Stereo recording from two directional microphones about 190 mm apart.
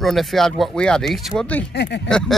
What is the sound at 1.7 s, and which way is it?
Speech, 65° left (ahead or behind).